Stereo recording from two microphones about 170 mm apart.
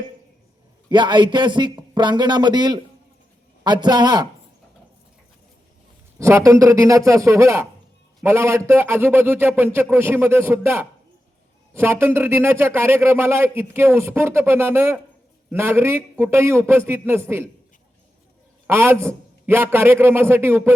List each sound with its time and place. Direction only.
0.9 s a man's voice: 25° right (ahead or behind)
6.1 s speech: 15° right (ahead or behind)
18.7 s speech: 15° right (ahead or behind)